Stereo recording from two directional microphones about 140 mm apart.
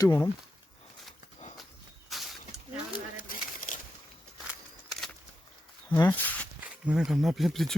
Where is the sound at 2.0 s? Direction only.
Centre (ahead or behind).